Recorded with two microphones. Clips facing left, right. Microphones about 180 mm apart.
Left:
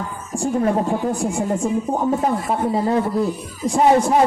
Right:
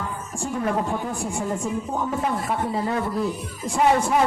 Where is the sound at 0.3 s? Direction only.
30° left (ahead or behind).